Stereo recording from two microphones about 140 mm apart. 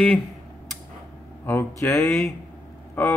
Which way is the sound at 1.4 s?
15° left (ahead or behind).